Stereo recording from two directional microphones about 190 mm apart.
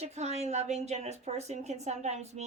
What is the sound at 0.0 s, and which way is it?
A woman's voice, 35° right (ahead or behind).